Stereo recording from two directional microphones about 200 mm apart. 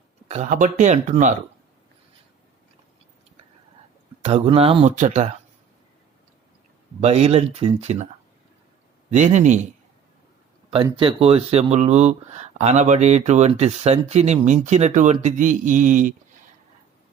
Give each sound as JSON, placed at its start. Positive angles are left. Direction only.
{"t": 0.3, "sound": "speech", "side_deg": -35}
{"t": 4.2, "sound": "speech", "side_deg": -30}
{"t": 7.0, "sound": "speech", "side_deg": -30}
{"t": 9.0, "sound": "speech", "side_deg": -35}
{"t": 10.8, "sound": "speech", "side_deg": -25}